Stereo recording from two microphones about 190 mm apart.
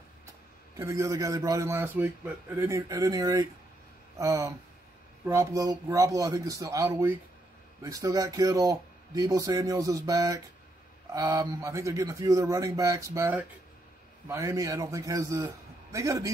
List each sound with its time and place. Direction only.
0.7 s a man's voice: 15° right (ahead or behind)